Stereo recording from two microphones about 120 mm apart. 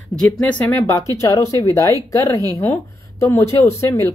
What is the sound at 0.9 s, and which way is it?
Speech, 25° left (ahead or behind).